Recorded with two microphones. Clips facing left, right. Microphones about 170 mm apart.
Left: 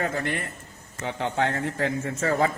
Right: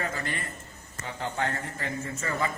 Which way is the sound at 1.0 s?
80° left.